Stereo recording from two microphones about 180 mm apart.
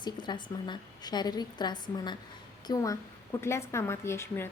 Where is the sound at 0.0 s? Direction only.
25° left (ahead or behind).